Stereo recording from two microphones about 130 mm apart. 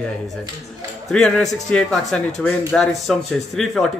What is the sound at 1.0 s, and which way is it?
Speech, 5° left (ahead or behind).